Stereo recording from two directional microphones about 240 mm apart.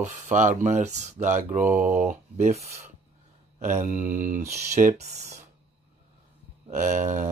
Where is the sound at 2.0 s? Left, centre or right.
Right.